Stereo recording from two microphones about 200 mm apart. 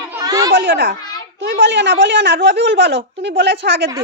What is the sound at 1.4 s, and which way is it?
A woman's voice, 60° right (ahead or behind).